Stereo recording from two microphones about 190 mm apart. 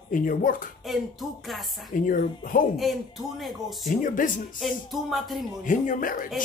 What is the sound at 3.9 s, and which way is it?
Speech, 45° left (ahead or behind).